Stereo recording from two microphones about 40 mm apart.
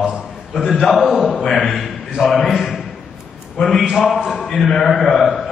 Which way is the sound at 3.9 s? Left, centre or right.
Centre.